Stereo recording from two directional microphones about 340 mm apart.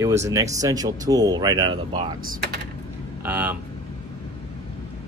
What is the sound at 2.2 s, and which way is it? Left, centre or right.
Speech, right.